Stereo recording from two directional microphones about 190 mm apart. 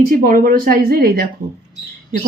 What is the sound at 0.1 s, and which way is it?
Speech, 45° right (ahead or behind).